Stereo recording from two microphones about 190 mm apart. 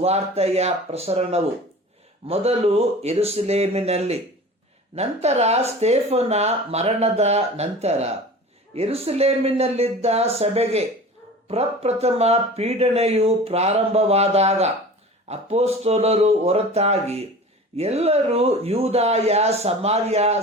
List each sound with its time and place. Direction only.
0.0 s speech: 35° right (ahead or behind)